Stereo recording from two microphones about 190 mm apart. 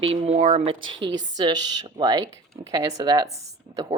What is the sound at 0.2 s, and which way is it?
Speech, 40° right (ahead or behind).